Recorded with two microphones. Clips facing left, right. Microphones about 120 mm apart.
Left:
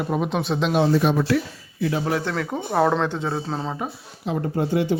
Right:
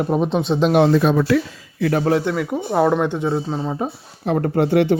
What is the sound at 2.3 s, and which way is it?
Speech, 10° right (ahead or behind).